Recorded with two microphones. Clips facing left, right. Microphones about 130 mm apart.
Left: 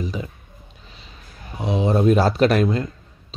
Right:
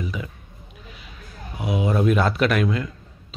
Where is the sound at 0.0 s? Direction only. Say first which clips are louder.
Left 2 dB; 35° left (ahead or behind).